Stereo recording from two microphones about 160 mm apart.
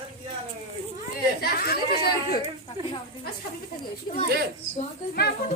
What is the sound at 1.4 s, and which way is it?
Chatter, 75° left (ahead or behind).